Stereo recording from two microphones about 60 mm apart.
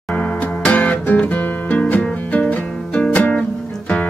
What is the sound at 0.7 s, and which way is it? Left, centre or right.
Music, left.